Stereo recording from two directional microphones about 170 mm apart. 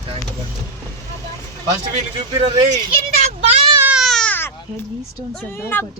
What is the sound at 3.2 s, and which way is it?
Speech, 40° right (ahead or behind).